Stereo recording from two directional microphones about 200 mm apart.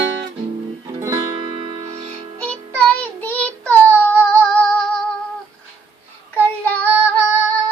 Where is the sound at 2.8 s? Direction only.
10° left (ahead or behind).